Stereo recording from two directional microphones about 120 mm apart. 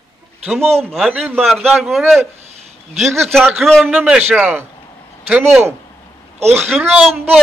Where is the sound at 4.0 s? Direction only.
10° right (ahead or behind).